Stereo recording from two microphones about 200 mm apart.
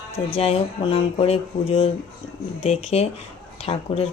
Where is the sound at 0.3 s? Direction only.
30° left (ahead or behind).